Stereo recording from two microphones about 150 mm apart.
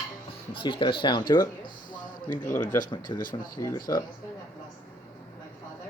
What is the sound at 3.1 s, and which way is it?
Speech, 65° left (ahead or behind).